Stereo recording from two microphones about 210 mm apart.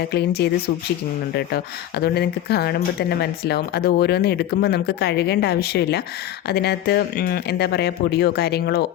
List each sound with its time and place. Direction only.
0.1 s speech: 50° left (ahead or behind)